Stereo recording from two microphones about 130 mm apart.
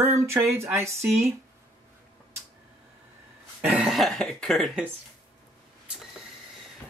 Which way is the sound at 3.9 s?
Centre (ahead or behind).